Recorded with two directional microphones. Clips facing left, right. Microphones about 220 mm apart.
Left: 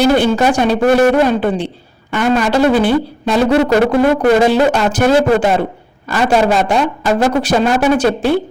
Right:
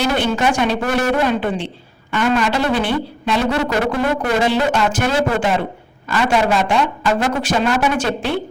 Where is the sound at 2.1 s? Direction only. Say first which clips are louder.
Left 4 dB; 45° left (ahead or behind).